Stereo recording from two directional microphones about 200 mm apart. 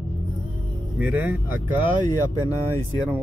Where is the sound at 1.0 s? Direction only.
5° right (ahead or behind).